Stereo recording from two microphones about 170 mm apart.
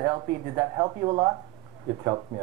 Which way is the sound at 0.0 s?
20° right (ahead or behind).